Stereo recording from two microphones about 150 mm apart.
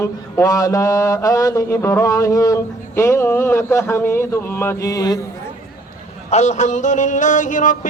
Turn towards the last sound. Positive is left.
turn(degrees=60)  # may be behind; listen again after turning